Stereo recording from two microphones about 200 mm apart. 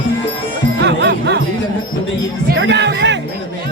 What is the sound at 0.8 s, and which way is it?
Music, 60° right (ahead or behind).